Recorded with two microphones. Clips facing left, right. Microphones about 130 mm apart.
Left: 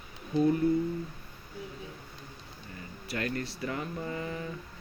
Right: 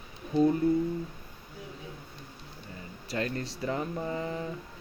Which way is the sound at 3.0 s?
25° right (ahead or behind).